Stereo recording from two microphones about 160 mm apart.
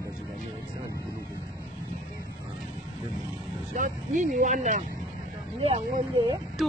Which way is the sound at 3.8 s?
50° right (ahead or behind).